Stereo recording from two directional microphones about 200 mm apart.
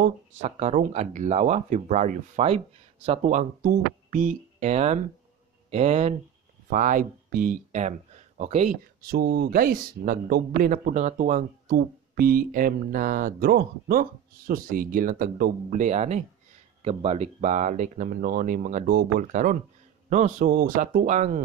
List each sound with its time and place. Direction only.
0.0 s speech: 35° right (ahead or behind)
9.0 s speech: 50° right (ahead or behind)